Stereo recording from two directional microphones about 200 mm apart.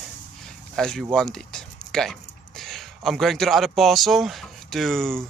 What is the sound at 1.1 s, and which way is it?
Speech, 5° left (ahead or behind).